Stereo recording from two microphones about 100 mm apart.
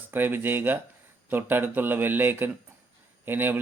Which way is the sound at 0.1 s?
20° right (ahead or behind).